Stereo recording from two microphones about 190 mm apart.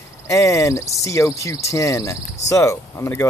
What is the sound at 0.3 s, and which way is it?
Speech, 15° left (ahead or behind).